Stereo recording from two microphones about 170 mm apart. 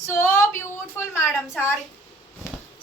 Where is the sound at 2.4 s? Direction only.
15° left (ahead or behind).